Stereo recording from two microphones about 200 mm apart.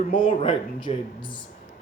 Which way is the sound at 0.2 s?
25° left (ahead or behind).